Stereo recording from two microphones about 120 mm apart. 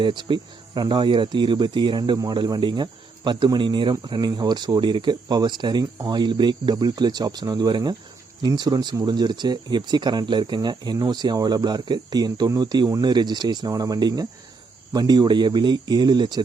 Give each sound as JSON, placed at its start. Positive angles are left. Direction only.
{"t": 0.0, "sound": "speech", "side_deg": -40}